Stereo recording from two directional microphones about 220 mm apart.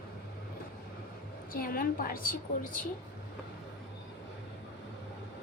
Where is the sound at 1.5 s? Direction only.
40° left (ahead or behind).